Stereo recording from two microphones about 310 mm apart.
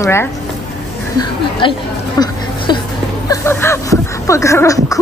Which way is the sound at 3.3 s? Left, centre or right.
Centre.